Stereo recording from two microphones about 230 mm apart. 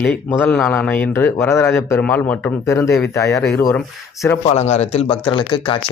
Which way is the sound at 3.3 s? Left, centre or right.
Centre.